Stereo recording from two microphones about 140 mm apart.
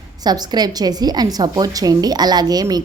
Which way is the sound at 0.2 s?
30° right (ahead or behind).